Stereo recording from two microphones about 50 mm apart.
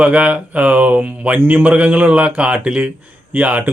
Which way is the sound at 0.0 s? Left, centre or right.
Right.